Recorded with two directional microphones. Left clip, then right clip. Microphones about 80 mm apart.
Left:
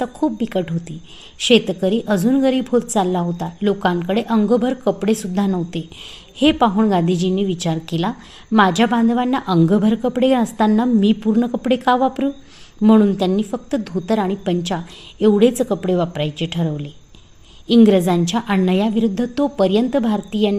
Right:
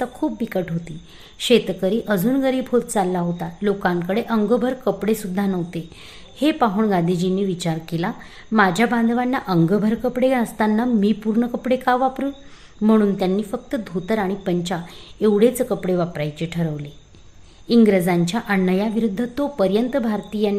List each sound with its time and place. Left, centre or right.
0.0 s a woman's voice: left